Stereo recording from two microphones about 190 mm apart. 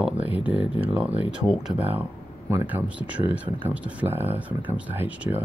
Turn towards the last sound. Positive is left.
turn(degrees=-10)  # may be behind; listen again after turning